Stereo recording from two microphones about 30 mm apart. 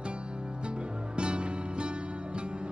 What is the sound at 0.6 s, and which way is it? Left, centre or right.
Music, right.